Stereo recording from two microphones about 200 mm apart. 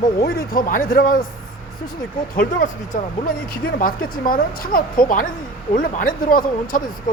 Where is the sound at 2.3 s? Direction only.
40° left (ahead or behind).